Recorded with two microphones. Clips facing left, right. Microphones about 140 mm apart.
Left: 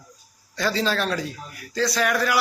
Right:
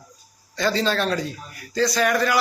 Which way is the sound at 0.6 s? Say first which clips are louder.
Right 2 dB; 5° left (ahead or behind).